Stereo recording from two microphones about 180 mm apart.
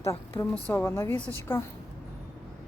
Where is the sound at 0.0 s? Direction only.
15° left (ahead or behind).